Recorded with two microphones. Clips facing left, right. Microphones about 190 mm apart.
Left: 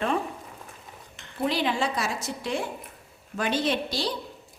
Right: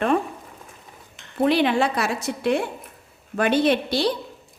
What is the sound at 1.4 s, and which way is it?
Speech, 65° right (ahead or behind).